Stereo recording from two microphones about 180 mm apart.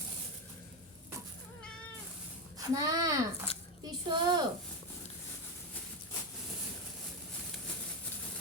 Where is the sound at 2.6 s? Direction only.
20° right (ahead or behind).